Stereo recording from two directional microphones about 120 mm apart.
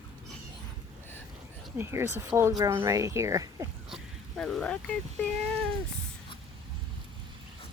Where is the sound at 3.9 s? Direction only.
5° left (ahead or behind).